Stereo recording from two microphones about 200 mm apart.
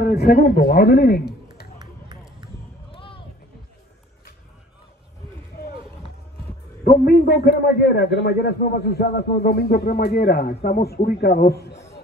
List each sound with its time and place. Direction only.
0.0 s a man's voice: 55° left (ahead or behind)
1.8 s run: 20° right (ahead or behind)
2.9 s a sound: 25° left (ahead or behind)
6.8 s a man's voice: 50° left (ahead or behind)